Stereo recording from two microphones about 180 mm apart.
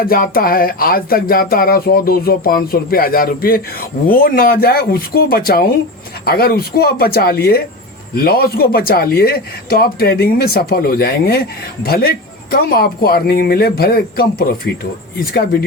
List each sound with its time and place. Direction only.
0.0 s speech: 55° left (ahead or behind)